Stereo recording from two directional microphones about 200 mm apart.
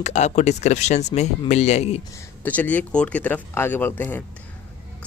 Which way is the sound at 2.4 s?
10° left (ahead or behind).